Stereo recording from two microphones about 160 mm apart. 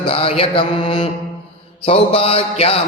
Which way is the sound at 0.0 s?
35° left (ahead or behind).